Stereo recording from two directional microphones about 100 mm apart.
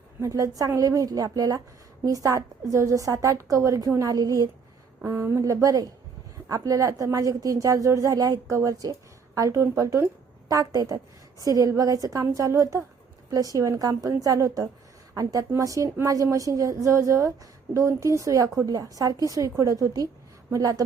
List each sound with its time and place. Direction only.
0.2 s a woman's voice: 30° right (ahead or behind)